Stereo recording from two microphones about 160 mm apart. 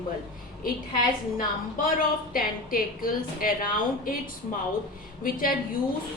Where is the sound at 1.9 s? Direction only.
60° left (ahead or behind).